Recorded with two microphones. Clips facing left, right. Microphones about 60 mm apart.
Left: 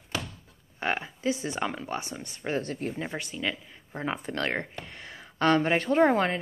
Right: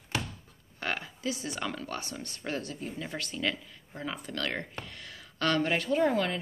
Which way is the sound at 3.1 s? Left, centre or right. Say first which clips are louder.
Left 1 dB; centre.